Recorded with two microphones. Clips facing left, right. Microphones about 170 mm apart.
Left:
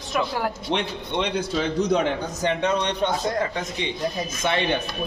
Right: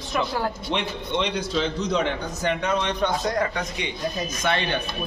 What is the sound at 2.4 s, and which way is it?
Speech, 30° left (ahead or behind).